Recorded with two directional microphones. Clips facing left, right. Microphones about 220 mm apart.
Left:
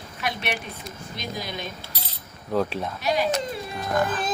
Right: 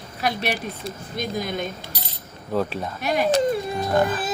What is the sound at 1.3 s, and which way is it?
Speech, 50° right (ahead or behind).